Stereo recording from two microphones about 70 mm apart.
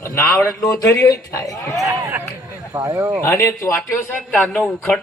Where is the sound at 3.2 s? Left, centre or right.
Left.